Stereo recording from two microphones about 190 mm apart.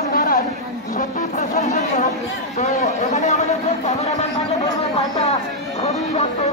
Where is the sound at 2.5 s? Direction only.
35° left (ahead or behind).